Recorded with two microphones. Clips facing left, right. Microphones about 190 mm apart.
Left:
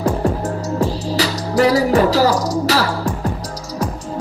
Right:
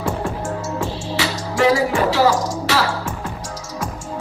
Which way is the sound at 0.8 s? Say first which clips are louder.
Left 7 dB; 40° left (ahead or behind).